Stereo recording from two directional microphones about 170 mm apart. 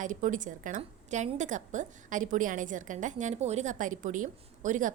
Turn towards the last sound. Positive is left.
turn(degrees=-50)  # may be behind; listen again after turning